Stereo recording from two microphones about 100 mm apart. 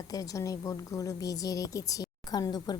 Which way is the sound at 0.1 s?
35° left (ahead or behind).